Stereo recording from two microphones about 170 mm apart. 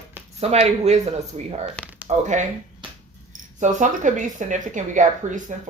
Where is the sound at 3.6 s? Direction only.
45° right (ahead or behind).